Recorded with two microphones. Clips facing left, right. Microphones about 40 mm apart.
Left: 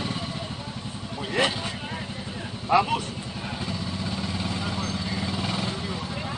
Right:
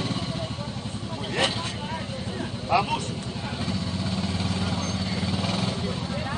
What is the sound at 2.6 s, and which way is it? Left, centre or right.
Speech, centre.